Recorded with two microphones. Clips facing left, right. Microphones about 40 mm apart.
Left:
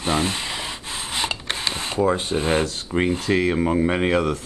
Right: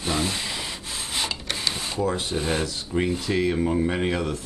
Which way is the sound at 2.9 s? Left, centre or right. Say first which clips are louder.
Left 2 dB; left.